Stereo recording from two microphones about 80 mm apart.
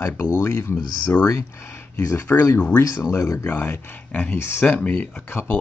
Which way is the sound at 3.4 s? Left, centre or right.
Left.